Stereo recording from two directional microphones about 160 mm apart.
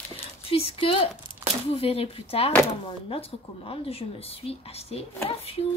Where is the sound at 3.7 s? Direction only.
35° left (ahead or behind).